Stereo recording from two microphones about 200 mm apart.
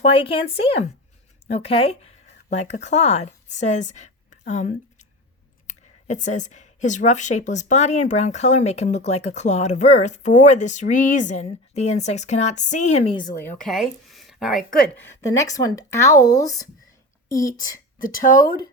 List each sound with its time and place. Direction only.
0.0 s speech: 30° left (ahead or behind)
13.2 s speech: 10° left (ahead or behind)
13.7 s speech: centre (ahead or behind)
15.4 s speech: 15° left (ahead or behind)
18.0 s speech: 40° left (ahead or behind)